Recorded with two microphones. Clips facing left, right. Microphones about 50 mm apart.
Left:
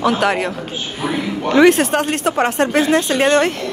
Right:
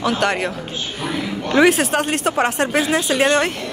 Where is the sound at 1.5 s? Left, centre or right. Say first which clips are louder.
Left 3 dB; centre.